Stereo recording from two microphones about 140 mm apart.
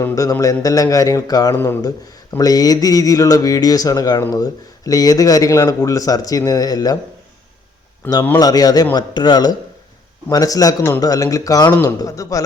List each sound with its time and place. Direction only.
0.0 s speech: 25° left (ahead or behind)
8.0 s speech: 15° left (ahead or behind)
8.4 s speech: 25° left (ahead or behind)